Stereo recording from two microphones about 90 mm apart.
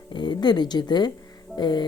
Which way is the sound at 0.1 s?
60° left (ahead or behind).